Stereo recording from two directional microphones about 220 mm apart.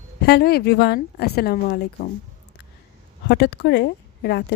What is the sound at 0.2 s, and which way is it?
Speech, 45° left (ahead or behind).